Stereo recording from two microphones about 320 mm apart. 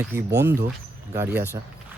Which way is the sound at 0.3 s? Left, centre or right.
Centre.